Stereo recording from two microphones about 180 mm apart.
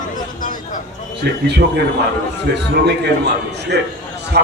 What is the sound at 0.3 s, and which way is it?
Vehicle, 45° left (ahead or behind).